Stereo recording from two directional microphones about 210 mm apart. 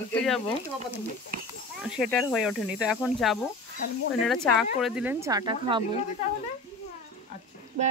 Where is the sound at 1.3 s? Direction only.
45° right (ahead or behind).